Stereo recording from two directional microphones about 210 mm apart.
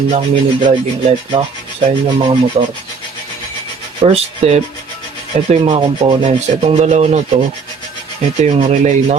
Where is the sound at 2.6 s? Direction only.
30° right (ahead or behind).